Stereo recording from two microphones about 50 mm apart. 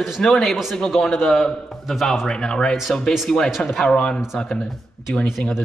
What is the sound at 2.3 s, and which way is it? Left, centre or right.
Speech, centre.